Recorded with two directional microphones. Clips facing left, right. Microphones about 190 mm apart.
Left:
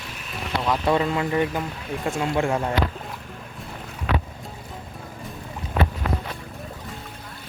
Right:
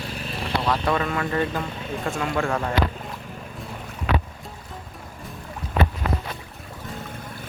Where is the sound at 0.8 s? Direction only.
25° left (ahead or behind).